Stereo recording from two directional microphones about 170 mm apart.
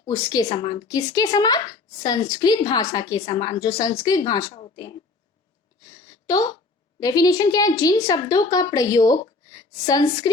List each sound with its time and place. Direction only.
0.0 s a woman's voice: 20° left (ahead or behind)
6.2 s a woman's voice: 20° left (ahead or behind)